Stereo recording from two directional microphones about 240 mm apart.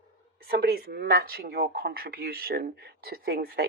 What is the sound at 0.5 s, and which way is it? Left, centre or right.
Speech, right.